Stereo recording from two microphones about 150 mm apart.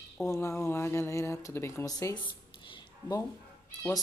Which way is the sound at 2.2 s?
30° left (ahead or behind).